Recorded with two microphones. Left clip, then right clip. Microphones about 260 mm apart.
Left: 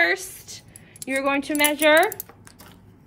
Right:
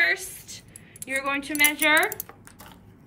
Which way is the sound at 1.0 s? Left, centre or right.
Centre.